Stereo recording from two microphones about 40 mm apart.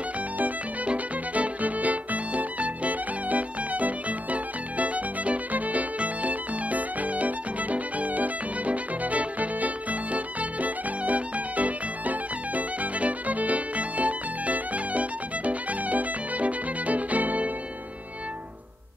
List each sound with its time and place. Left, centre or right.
0.8 s music: right